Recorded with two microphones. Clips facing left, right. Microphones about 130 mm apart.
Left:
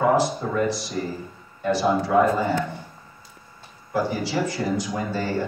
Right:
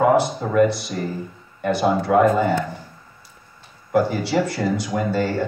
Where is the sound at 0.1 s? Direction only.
60° right (ahead or behind).